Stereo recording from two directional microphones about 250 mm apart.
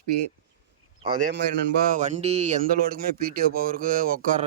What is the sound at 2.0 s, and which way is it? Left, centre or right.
Speech, right.